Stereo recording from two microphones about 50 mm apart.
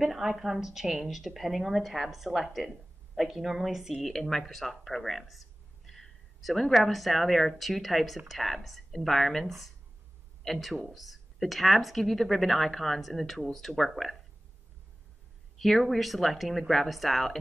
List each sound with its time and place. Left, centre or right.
0.0 s a woman's voice: centre
4.0 s a woman's voice: centre
15.6 s a woman's voice: centre